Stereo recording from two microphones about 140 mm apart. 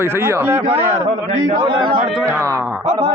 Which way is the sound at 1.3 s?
30° right (ahead or behind).